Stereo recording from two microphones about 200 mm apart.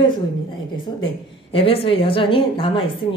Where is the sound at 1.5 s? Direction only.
30° left (ahead or behind).